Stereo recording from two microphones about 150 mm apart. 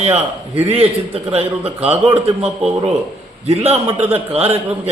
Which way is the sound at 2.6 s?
45° right (ahead or behind).